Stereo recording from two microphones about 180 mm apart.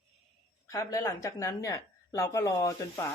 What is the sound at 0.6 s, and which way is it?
Speech, 20° left (ahead or behind).